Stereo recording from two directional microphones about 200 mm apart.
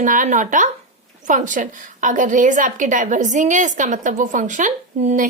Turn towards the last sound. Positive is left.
turn(degrees=-35)  # may be behind; listen again after turning